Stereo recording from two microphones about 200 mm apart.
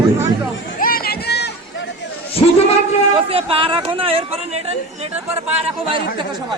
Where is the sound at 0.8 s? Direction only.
45° left (ahead or behind).